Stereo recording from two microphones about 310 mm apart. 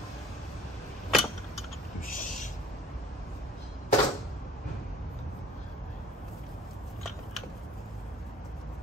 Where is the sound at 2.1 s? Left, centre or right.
Left.